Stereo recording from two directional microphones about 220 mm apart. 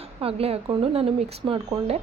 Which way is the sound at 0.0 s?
25° right (ahead or behind).